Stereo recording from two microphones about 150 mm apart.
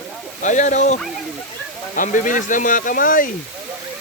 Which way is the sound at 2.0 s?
60° left (ahead or behind).